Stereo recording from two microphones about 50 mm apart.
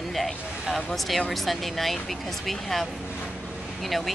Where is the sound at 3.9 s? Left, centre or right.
Centre.